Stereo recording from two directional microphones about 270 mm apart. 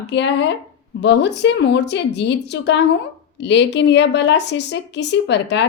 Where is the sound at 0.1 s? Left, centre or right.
Left.